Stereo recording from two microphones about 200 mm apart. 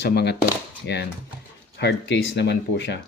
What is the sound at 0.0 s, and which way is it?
Speech, 55° left (ahead or behind).